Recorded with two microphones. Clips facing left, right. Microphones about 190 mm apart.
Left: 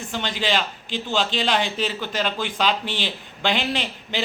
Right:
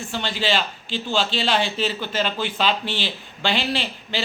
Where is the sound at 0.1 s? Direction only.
15° left (ahead or behind).